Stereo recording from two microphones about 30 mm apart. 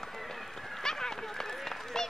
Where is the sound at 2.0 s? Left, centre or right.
Centre.